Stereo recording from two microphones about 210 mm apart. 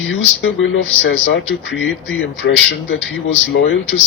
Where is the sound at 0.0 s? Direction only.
65° left (ahead or behind).